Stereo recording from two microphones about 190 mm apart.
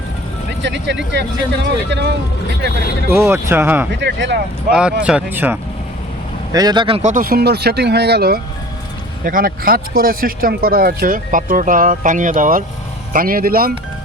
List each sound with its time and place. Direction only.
0.6 s speech: 65° right (ahead or behind)
3.1 s speech: 15° right (ahead or behind)
4.0 s speech: 65° right (ahead or behind)
4.7 s speech: 5° right (ahead or behind)
6.5 s speech: 20° right (ahead or behind)
7.1 s speech: 50° right (ahead or behind)